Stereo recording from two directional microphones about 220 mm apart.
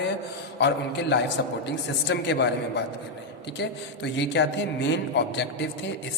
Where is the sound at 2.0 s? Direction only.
55° left (ahead or behind).